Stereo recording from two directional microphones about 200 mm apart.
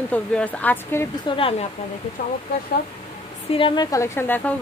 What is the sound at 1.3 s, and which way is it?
Speech, 25° left (ahead or behind).